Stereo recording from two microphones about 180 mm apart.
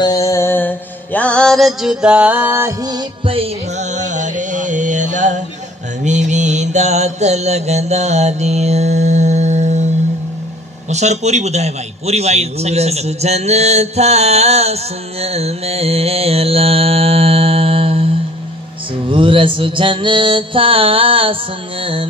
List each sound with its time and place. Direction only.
0.0 s mantra: 20° left (ahead or behind); by 9.8 s 40° right (ahead or behind)
10.9 s a man's voice: 40° right (ahead or behind)
19.0 s mantra: 30° right (ahead or behind)